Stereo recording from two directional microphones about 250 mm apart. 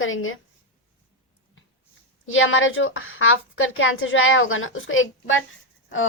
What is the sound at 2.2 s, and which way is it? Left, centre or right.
A woman's voice, left.